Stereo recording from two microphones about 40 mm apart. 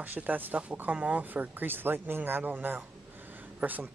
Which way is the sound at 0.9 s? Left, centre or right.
Right.